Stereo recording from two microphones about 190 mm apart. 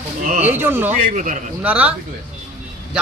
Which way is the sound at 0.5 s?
10° right (ahead or behind).